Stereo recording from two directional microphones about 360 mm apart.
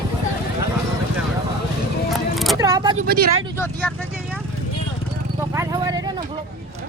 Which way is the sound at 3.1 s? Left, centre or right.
Right.